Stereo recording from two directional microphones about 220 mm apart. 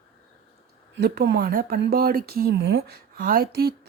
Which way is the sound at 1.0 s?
45° right (ahead or behind).